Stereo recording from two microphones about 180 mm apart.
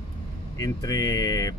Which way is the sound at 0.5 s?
20° left (ahead or behind).